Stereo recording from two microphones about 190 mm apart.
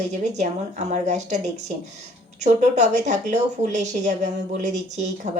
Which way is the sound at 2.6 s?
40° right (ahead or behind).